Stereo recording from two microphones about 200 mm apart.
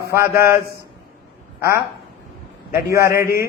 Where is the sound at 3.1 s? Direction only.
50° left (ahead or behind).